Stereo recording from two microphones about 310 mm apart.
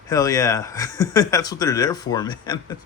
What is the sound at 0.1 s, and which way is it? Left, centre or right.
Speech, centre.